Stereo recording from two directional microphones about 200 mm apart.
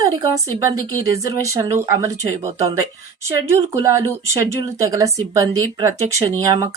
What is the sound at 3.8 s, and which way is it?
Speech, 15° right (ahead or behind).